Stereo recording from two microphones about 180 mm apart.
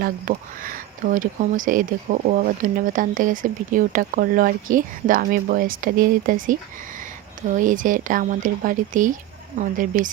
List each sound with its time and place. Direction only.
0.0 s speech: 50° right (ahead or behind)